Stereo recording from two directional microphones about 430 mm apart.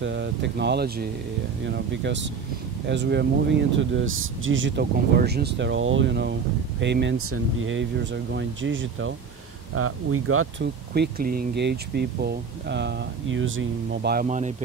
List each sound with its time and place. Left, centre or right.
0.0 s speech: right